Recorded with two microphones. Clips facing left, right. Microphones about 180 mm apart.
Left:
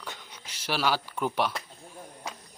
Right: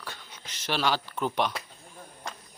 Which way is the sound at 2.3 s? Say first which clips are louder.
Even; 5° left (ahead or behind).